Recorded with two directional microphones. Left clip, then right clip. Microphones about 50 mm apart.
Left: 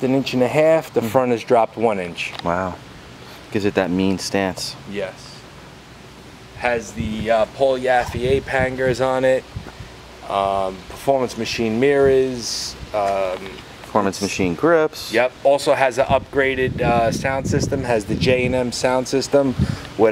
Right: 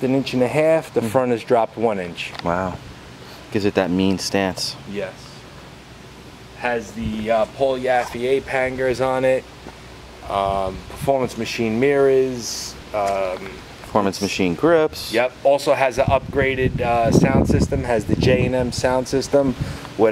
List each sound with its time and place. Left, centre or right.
0.0 s speech: left
2.4 s speech: centre
6.6 s speech: left
13.9 s speech: centre
14.3 s speech: centre
15.2 s speech: left